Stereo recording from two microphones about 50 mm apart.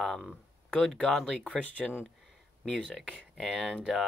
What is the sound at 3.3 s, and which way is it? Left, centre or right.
Speech, centre.